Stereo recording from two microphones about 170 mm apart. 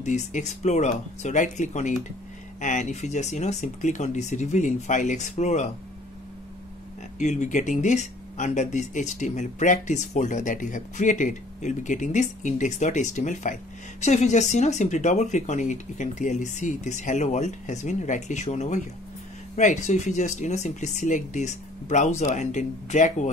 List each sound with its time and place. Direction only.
0.0 s speech: 45° left (ahead or behind)
7.2 s speech: 45° left (ahead or behind)